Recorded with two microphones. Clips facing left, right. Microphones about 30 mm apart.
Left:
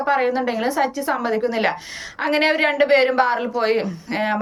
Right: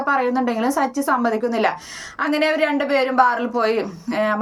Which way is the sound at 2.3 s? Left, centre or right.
Left.